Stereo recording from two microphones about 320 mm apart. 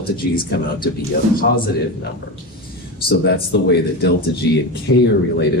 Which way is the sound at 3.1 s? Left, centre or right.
Left.